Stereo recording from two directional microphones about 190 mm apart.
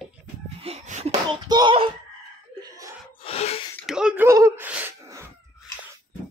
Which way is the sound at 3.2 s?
30° left (ahead or behind).